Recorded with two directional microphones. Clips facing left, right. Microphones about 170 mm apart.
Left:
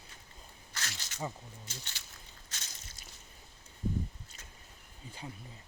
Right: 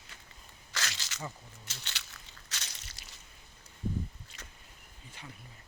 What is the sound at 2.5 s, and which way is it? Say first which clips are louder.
Crushing: right 4 dB; 75° right (ahead or behind).